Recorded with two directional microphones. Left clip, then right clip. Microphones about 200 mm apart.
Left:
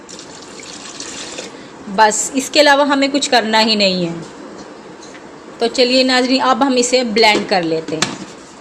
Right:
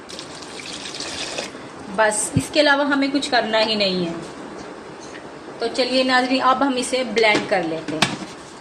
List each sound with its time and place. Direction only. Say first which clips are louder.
2.0 s a woman's voice: left 6 dB; 50° left (ahead or behind)
5.5 s a woman's voice: left 7 dB; 50° left (ahead or behind)